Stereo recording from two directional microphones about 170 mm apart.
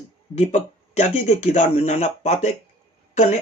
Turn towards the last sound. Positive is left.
turn(degrees=40)  # may be behind; listen again after turning